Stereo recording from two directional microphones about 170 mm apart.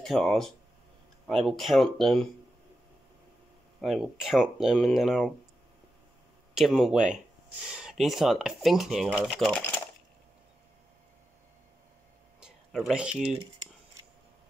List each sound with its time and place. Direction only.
0.0 s speech: centre (ahead or behind)
3.8 s speech: centre (ahead or behind)
6.5 s speech: centre (ahead or behind)
12.4 s speech: centre (ahead or behind)